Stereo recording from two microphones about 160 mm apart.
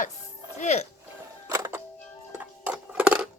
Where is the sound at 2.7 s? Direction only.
5° right (ahead or behind).